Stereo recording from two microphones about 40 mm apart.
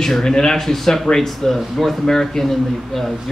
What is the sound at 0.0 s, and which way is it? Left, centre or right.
A man's voice, centre.